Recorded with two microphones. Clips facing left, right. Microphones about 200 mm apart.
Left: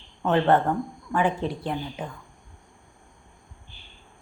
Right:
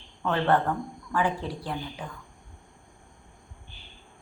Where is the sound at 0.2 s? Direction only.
20° left (ahead or behind).